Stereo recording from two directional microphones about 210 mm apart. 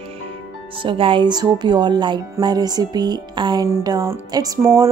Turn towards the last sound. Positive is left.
turn(degrees=-15)  # may be behind; listen again after turning